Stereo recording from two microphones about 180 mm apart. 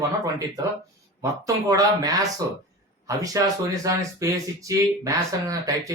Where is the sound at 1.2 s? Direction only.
20° right (ahead or behind).